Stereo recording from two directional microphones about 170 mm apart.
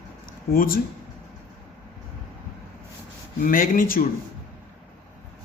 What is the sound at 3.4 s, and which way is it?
Speech, 55° left (ahead or behind).